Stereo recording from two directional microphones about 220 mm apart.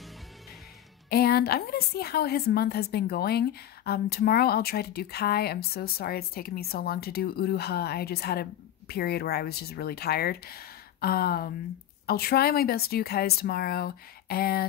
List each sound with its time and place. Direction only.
1.1 s a woman's voice: 45° left (ahead or behind)